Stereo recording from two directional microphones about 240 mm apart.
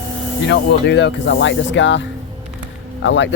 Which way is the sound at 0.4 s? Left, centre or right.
Left.